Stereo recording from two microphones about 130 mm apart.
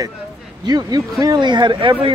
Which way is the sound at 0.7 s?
30° right (ahead or behind).